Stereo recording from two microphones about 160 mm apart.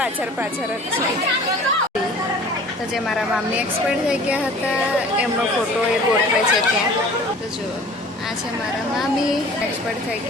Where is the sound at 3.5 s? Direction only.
5° right (ahead or behind).